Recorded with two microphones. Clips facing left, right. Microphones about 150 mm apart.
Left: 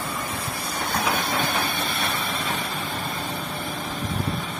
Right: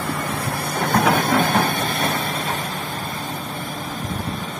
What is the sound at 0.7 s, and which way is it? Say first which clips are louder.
Vehicle: right 8 dB; 55° right (ahead or behind).